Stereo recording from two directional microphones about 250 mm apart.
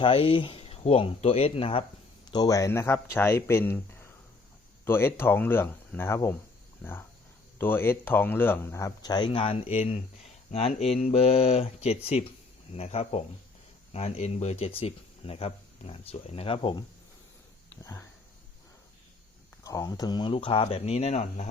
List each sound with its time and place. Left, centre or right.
0.0 s speech: left
7.6 s speech: centre
19.6 s speech: centre